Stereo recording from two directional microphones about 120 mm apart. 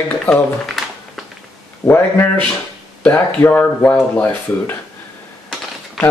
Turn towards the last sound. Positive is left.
turn(degrees=10)  # may be behind; listen again after turning